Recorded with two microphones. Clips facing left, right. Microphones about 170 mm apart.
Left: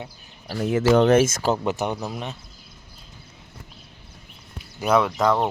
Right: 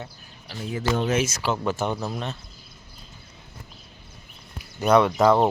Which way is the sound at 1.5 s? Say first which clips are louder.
Left 1 dB; 20° left (ahead or behind).